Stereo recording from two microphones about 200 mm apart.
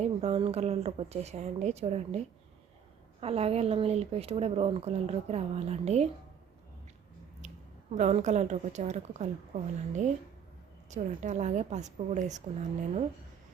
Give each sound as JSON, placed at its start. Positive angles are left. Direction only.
{"t": 0.0, "sound": "speech", "side_deg": -30}
{"t": 7.9, "sound": "speech", "side_deg": -35}